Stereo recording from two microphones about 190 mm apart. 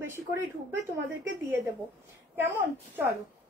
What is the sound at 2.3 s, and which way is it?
Speech, 10° right (ahead or behind).